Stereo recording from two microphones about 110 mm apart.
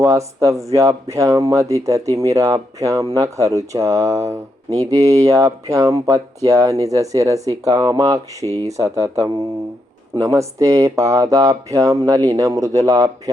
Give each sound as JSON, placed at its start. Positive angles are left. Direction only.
{"t": 0.0, "sound": "speech", "side_deg": -30}